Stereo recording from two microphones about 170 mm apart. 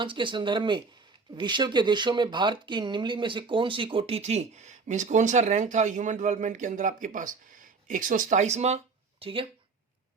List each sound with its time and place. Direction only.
0.0 s speech: 30° right (ahead or behind)